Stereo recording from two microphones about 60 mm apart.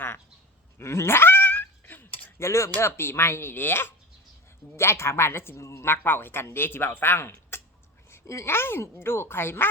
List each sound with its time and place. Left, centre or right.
0.8 s a sound: left
2.4 s speech: left
2.8 s speech: left